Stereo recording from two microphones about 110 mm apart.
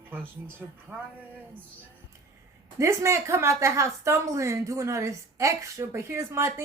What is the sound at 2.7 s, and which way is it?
A woman's voice, 25° right (ahead or behind).